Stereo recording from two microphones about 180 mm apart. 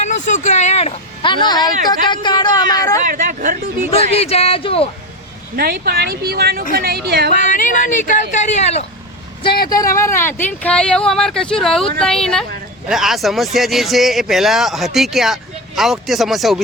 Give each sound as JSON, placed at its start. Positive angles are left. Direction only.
{"t": 0.0, "sound": "speech", "side_deg": 40}
{"t": 3.1, "sound": "speech", "side_deg": -45}
{"t": 3.9, "sound": "speech", "side_deg": 35}
{"t": 5.5, "sound": "speech", "side_deg": -60}
{"t": 7.4, "sound": "speech", "side_deg": 45}
{"t": 9.6, "sound": "speech", "side_deg": 20}